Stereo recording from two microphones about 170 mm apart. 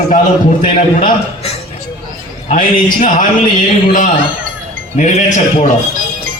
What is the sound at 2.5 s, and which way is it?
Speech, 50° left (ahead or behind).